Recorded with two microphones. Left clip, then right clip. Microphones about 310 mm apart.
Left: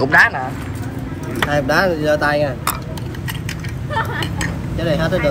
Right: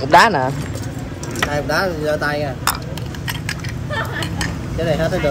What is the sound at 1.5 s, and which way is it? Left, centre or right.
Speech, centre.